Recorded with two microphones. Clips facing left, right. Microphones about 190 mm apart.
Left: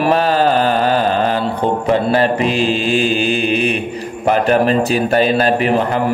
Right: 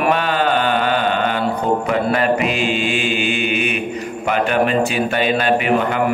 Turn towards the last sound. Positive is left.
turn(degrees=35)  # may be behind; listen again after turning